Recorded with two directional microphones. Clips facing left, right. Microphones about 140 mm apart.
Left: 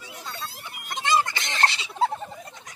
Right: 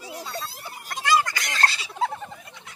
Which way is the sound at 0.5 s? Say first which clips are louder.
Right 2 dB; 35° right (ahead or behind).